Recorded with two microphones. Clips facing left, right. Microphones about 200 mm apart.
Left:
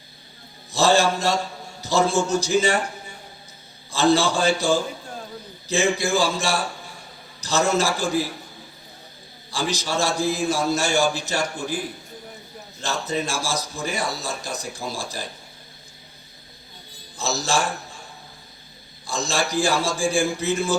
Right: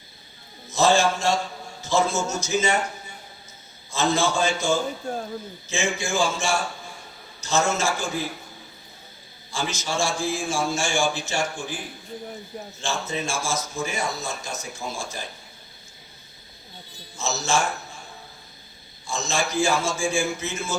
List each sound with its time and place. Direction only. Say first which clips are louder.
0.7 s a man's voice: left 1 dB; 35° left (ahead or behind)
3.9 s a man's voice: left 4 dB; 35° left (ahead or behind)
9.5 s a man's voice: left 3 dB; 35° left (ahead or behind)
12.8 s a man's voice: left 3 dB; 35° left (ahead or behind)
17.2 s a man's voice: left 1 dB; 35° left (ahead or behind)
19.0 s a man's voice: left 2 dB; 35° left (ahead or behind)